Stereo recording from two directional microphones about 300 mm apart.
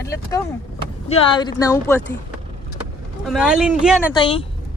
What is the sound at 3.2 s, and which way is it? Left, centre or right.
Speech, centre.